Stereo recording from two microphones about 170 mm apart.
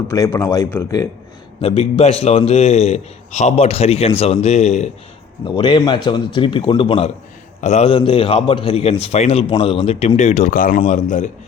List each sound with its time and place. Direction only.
0.1 s a man's voice: 20° left (ahead or behind)
1.6 s a man's voice: 35° left (ahead or behind)
5.5 s a man's voice: 30° left (ahead or behind); by 11.3 s 50° left (ahead or behind)